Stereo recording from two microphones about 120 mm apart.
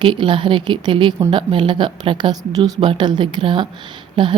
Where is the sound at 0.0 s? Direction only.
45° right (ahead or behind).